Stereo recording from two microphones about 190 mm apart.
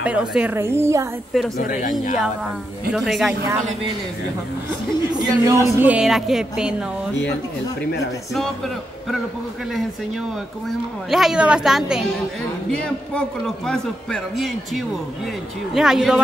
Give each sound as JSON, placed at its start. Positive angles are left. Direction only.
{"t": 0.0, "sound": "a woman's voice", "side_deg": -5}
{"t": 1.6, "sound": "speech", "side_deg": 45}
{"t": 2.9, "sound": "a woman's voice", "side_deg": 0}
{"t": 5.1, "sound": "a woman's voice", "side_deg": -15}
{"t": 11.1, "sound": "a woman's voice", "side_deg": 0}
{"t": 13.7, "sound": "a woman's voice", "side_deg": 0}
{"t": 15.7, "sound": "a woman's voice", "side_deg": 0}